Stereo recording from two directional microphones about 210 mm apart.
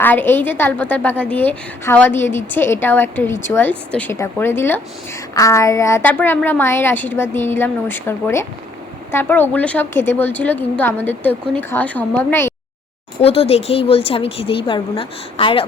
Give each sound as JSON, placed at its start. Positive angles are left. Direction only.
{"t": 0.0, "sound": "a woman's voice", "side_deg": 10}
{"t": 13.2, "sound": "a woman's voice", "side_deg": 30}